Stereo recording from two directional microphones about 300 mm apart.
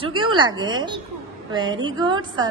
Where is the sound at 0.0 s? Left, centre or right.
Centre.